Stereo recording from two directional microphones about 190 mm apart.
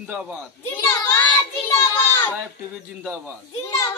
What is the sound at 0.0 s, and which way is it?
Speech, 5° right (ahead or behind).